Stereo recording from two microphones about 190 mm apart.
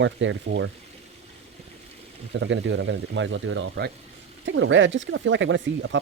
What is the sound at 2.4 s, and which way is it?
Speech, 75° right (ahead or behind).